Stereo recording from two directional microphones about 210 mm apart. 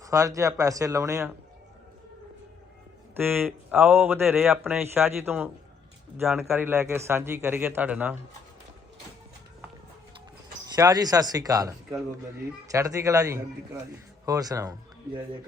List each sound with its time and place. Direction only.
0.0 s speech: 15° right (ahead or behind)
3.2 s speech: 10° right (ahead or behind)
10.8 s speech: 20° right (ahead or behind)